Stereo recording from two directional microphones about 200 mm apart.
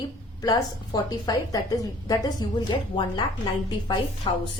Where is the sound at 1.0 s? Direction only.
20° left (ahead or behind).